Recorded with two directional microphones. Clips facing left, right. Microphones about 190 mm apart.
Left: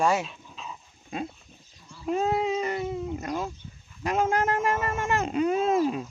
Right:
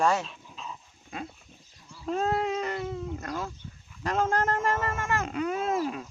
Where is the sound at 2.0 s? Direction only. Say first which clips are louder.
Left 2 dB; 10° left (ahead or behind).